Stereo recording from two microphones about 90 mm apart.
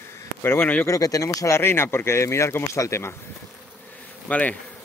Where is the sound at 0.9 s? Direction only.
40° left (ahead or behind).